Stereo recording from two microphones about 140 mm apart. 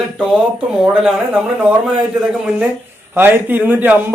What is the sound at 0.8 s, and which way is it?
Speech, 5° right (ahead or behind).